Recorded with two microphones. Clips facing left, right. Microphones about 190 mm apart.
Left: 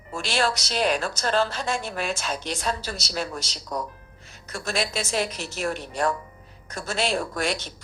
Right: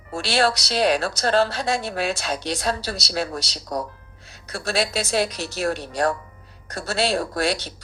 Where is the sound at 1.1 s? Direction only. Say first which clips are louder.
Right 4 dB; 65° right (ahead or behind).